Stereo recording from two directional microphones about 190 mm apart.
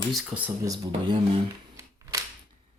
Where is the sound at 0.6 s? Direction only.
20° right (ahead or behind).